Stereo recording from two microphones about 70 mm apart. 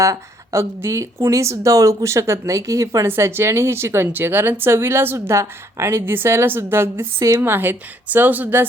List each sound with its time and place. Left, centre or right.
0.0 s speech: right
3.1 s speech: right
7.2 s speech: right
7.4 s a woman's voice: right